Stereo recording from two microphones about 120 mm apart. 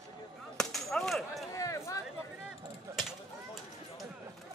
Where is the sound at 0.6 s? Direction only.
5° left (ahead or behind).